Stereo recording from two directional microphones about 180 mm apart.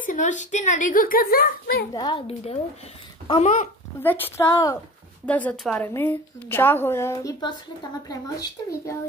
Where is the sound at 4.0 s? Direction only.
10° left (ahead or behind).